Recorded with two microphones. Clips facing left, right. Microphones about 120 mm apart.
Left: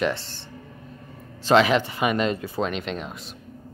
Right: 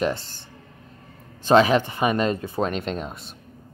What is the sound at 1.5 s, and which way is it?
Speech, 40° right (ahead or behind).